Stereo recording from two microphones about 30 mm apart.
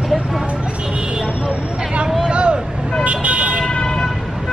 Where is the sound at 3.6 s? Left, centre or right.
Left.